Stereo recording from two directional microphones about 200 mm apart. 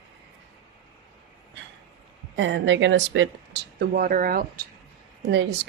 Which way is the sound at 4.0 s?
45° right (ahead or behind).